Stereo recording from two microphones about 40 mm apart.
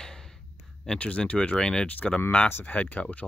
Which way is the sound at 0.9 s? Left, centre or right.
Left.